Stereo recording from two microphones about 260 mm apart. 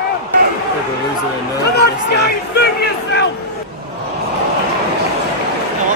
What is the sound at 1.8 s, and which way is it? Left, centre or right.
Speech, left.